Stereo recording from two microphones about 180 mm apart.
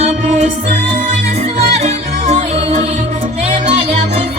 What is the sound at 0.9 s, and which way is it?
Music, 40° right (ahead or behind).